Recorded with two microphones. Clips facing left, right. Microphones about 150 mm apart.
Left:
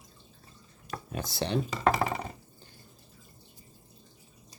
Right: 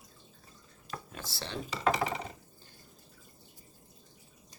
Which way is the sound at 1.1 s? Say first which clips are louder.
Left 13 dB; 15° left (ahead or behind).